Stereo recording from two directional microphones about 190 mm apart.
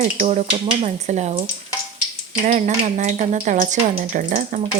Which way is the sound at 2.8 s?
40° right (ahead or behind).